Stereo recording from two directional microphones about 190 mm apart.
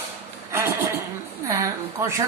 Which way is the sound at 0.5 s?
15° right (ahead or behind).